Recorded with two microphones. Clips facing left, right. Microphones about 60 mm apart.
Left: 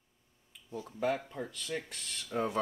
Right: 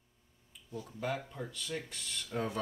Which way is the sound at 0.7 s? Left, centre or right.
Left.